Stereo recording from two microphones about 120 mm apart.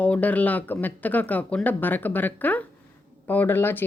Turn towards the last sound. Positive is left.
turn(degrees=15)  # may be behind; listen again after turning